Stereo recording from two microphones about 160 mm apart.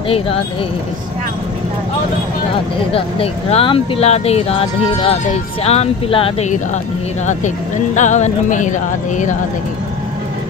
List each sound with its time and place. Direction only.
2.9 s speech: 40° left (ahead or behind)
7.2 s speech: 50° left (ahead or behind)